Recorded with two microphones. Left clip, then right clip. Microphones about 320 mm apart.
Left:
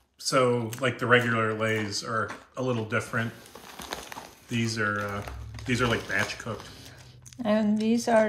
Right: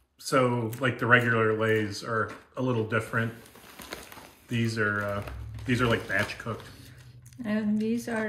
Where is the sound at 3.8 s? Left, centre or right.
Centre.